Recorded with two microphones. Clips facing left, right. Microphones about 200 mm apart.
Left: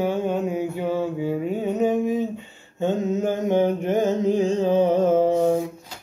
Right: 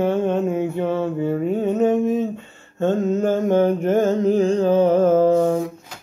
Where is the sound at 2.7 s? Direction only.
15° left (ahead or behind).